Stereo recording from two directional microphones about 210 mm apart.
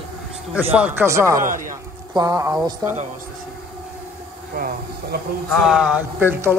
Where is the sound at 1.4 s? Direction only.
40° right (ahead or behind).